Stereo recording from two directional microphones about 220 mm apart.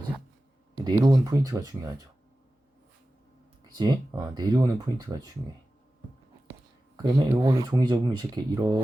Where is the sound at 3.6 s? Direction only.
15° right (ahead or behind).